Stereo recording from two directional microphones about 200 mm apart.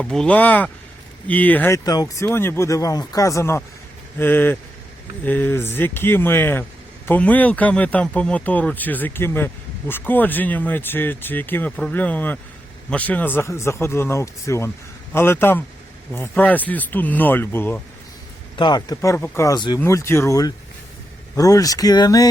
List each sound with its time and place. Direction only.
0.0 s speech: 5° left (ahead or behind)
18.5 s speech: 20° left (ahead or behind)